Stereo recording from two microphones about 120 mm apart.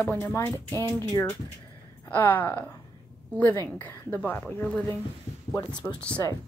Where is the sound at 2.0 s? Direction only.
15° left (ahead or behind).